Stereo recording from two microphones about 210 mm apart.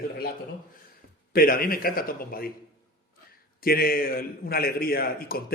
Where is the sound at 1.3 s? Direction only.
45° left (ahead or behind).